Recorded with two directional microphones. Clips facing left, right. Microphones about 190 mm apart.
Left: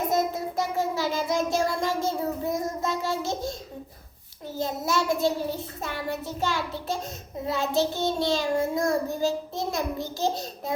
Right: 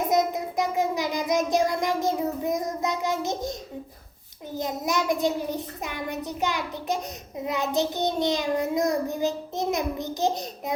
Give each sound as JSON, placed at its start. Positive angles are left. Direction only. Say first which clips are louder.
{"t": 0.1, "sound": "child singing", "louder": "right 2 dB", "side_deg": -15}
{"t": 4.5, "sound": "child singing", "louder": "even", "side_deg": -15}